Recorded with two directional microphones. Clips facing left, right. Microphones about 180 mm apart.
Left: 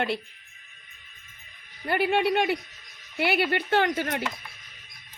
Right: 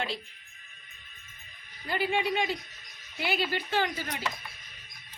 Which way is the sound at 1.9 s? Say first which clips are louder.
Left 5 dB; 65° left (ahead or behind).